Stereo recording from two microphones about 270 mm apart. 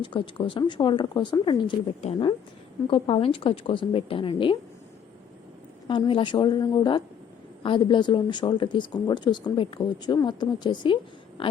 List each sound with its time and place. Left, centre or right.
0.0 s a woman's voice: centre
5.9 s speech: centre